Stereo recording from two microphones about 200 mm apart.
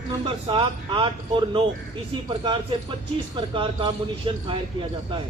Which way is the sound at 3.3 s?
25° right (ahead or behind).